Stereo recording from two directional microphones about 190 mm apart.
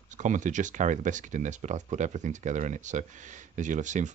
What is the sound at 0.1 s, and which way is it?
Speech, 40° right (ahead or behind).